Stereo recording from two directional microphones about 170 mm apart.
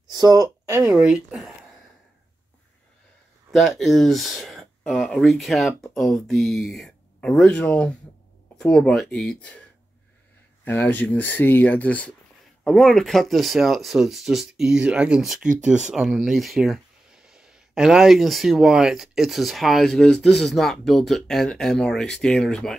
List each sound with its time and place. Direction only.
0.1 s a sound: 25° right (ahead or behind)
0.7 s speech: 5° right (ahead or behind)
3.5 s speech: centre (ahead or behind)
10.6 s speech: 10° left (ahead or behind)